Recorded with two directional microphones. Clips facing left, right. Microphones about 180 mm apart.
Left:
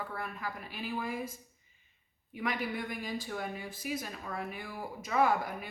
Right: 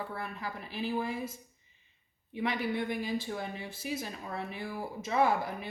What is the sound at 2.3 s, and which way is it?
Speech, 25° right (ahead or behind).